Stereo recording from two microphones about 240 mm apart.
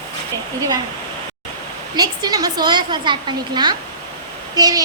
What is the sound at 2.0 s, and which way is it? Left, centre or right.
A woman's voice, centre.